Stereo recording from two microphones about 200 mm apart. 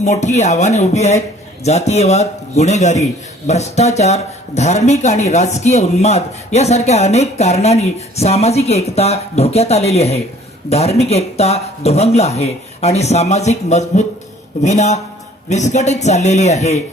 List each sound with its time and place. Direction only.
0.0 s a man's voice: 35° left (ahead or behind)